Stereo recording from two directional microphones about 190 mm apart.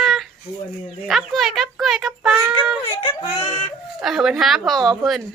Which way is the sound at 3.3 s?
35° left (ahead or behind).